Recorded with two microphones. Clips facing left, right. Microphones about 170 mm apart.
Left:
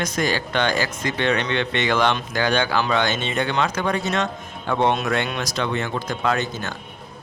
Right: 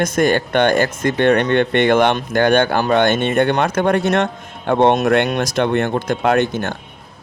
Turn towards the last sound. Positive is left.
turn(degrees=-60)  # may be behind; listen again after turning